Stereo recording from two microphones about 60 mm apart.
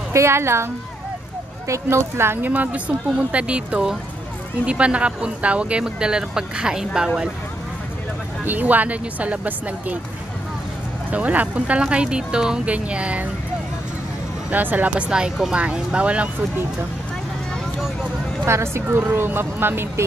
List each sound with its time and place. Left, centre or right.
0.1 s speech: right
1.7 s speech: right; by 7.1 s centre
8.5 s speech: right
11.1 s speech: right
14.5 s speech: right
18.4 s speech: right